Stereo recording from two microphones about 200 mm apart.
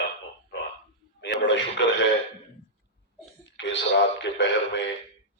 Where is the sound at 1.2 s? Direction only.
65° left (ahead or behind).